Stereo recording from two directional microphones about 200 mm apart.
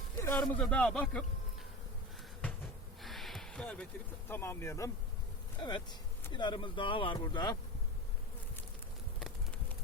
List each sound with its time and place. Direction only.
0.2 s speech: 10° left (ahead or behind)
3.0 s a sound: centre (ahead or behind)
4.3 s speech: 10° left (ahead or behind)